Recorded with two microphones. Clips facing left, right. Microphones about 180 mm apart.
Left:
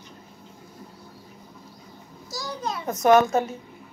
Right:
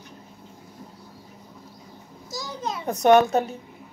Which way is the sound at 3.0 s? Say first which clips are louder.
Right 1 dB; 35° right (ahead or behind).